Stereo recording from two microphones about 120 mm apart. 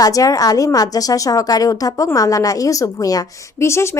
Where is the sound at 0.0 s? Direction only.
30° left (ahead or behind).